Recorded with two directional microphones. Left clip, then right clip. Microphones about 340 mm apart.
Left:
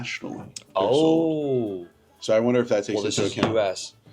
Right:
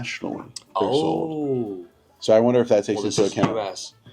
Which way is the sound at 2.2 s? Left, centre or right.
Right.